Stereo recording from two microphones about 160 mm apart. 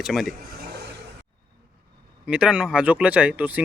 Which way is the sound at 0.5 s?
85° right.